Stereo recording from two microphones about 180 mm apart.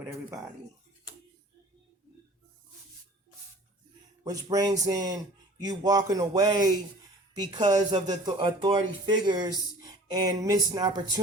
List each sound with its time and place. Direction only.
4.2 s speech: 20° right (ahead or behind)